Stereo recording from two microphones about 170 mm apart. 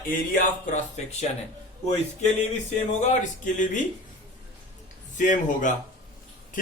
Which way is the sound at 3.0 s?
50° left (ahead or behind).